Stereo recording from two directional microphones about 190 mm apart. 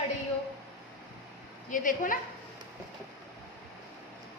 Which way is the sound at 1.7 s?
45° left (ahead or behind).